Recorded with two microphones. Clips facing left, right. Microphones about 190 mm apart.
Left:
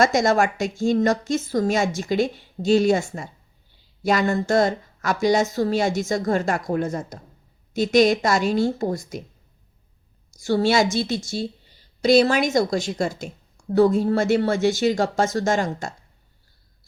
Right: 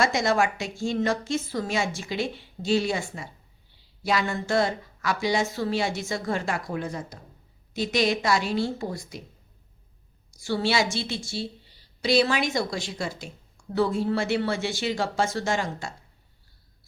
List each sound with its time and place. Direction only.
0.0 s a woman's voice: 45° left (ahead or behind)
10.4 s a woman's voice: 45° left (ahead or behind)